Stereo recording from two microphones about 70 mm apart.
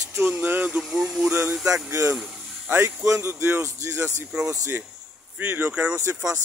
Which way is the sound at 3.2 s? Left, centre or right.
Right.